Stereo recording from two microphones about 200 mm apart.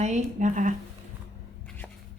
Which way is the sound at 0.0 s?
35° right (ahead or behind).